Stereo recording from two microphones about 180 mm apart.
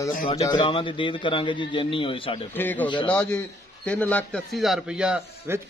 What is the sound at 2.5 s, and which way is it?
A man's voice, 10° left (ahead or behind).